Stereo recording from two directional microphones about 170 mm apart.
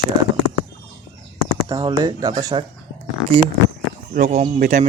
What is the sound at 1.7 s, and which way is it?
Speech, 25° right (ahead or behind).